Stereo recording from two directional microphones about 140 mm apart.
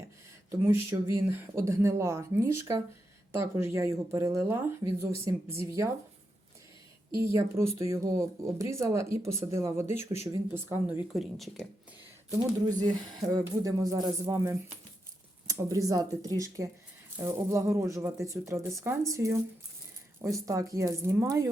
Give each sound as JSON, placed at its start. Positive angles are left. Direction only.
{"t": 0.5, "sound": "speech", "side_deg": -20}
{"t": 7.2, "sound": "speech", "side_deg": -20}
{"t": 11.1, "sound": "speech", "side_deg": 0}
{"t": 12.8, "sound": "speech", "side_deg": -25}